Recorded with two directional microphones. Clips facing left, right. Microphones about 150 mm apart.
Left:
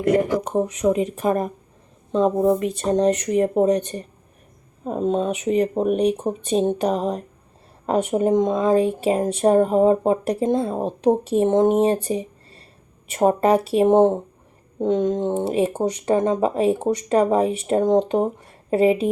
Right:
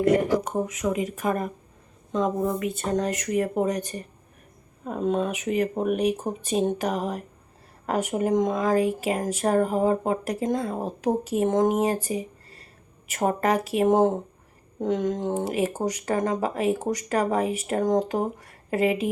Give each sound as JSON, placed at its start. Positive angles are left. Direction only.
{"t": 0.4, "sound": "speech", "side_deg": 30}
{"t": 12.0, "sound": "a sound", "side_deg": 30}
{"t": 13.1, "sound": "speech", "side_deg": 30}